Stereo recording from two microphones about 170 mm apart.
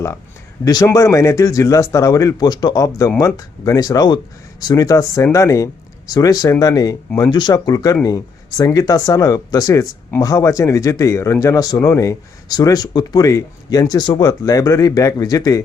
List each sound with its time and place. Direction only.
0.6 s speech: 20° left (ahead or behind)